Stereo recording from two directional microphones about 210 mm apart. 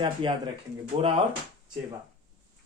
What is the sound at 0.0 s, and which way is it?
Speech, 25° right (ahead or behind).